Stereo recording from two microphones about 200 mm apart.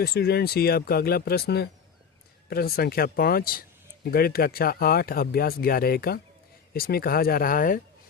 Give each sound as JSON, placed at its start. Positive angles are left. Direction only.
{"t": 0.0, "sound": "speech", "side_deg": 55}